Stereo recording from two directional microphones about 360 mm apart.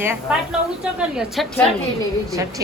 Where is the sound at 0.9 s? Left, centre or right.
Centre.